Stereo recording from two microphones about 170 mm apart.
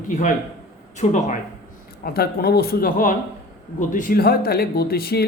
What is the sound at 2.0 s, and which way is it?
Speech, 65° left (ahead or behind).